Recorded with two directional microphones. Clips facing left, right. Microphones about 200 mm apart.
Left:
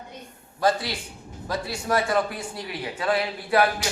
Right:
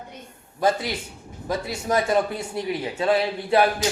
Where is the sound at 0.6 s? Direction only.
20° right (ahead or behind).